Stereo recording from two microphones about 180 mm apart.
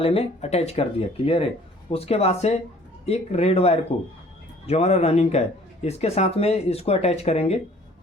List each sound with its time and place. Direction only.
0.0 s speech: 35° left (ahead or behind)